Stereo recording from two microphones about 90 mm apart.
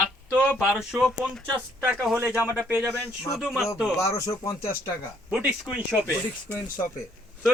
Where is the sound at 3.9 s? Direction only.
40° left (ahead or behind).